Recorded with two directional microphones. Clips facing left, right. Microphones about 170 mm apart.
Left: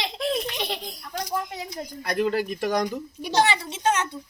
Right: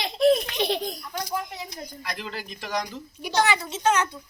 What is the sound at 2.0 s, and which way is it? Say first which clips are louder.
Speech: left 13 dB; 45° left (ahead or behind).